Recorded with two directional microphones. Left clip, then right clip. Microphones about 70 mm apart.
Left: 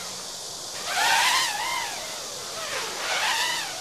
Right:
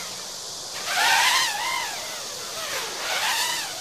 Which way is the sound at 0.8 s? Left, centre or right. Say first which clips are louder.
Right 2 dB; right.